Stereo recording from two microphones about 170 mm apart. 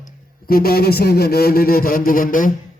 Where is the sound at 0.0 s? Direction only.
60° left (ahead or behind).